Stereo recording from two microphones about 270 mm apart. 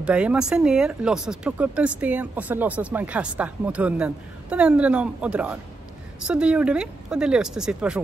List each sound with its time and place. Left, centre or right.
0.0 s speech: centre